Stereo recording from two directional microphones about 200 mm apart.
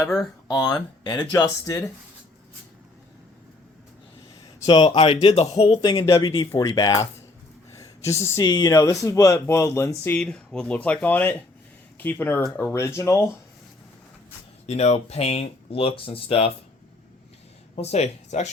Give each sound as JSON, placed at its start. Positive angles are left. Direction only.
{"t": 0.0, "sound": "speech", "side_deg": 5}
{"t": 0.4, "sound": "speech", "side_deg": 20}
{"t": 4.6, "sound": "speech", "side_deg": 25}
{"t": 14.7, "sound": "speech", "side_deg": 35}
{"t": 17.7, "sound": "speech", "side_deg": 30}